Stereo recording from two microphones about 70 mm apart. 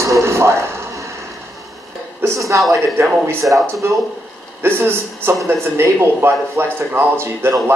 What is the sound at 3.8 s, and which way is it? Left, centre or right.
A man's voice, right.